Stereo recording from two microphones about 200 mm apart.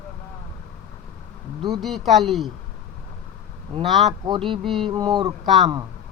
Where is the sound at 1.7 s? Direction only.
Centre (ahead or behind).